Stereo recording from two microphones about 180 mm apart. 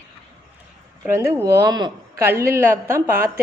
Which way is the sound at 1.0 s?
15° right (ahead or behind).